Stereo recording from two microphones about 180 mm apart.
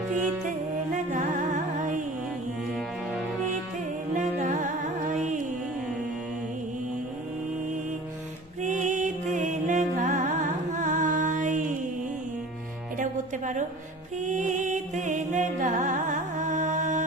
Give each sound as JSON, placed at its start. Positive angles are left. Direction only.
{"t": 1.1, "sound": "music", "side_deg": -45}
{"t": 4.1, "sound": "music", "side_deg": -45}
{"t": 8.6, "sound": "music", "side_deg": -40}
{"t": 12.9, "sound": "music", "side_deg": -45}